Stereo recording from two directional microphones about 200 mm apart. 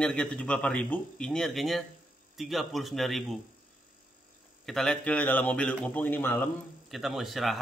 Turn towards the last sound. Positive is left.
turn(degrees=0)  # may be behind; listen again after turning